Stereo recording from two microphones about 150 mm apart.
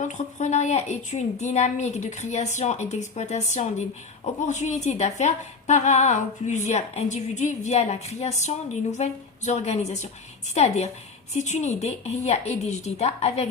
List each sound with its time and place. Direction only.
0.0 s a woman's voice: 50° left (ahead or behind)